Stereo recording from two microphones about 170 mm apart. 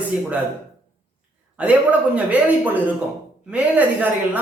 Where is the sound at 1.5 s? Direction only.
5° right (ahead or behind).